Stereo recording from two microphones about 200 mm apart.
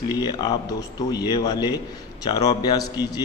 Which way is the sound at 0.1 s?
20° left (ahead or behind).